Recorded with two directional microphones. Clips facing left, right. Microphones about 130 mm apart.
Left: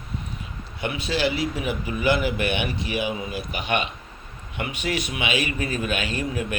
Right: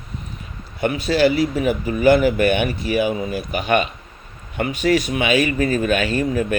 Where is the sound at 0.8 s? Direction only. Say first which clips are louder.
Right 8 dB; 45° right (ahead or behind).